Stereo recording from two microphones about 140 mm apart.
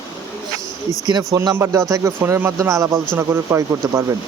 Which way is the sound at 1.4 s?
20° right (ahead or behind).